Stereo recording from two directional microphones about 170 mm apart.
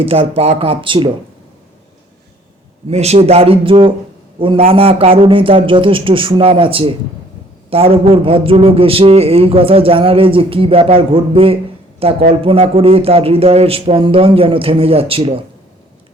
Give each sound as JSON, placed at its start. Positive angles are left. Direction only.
{"t": 0.0, "sound": "a man's voice", "side_deg": -35}
{"t": 2.9, "sound": "a man's voice", "side_deg": -40}